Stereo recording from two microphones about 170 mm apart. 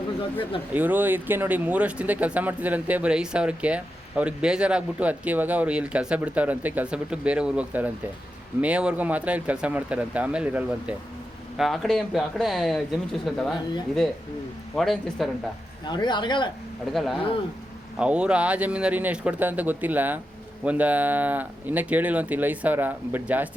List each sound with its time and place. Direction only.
0.7 s speech: 10° right (ahead or behind)
14.8 s speech: centre (ahead or behind)
15.9 s speech: 25° left (ahead or behind)
16.9 s speech: centre (ahead or behind)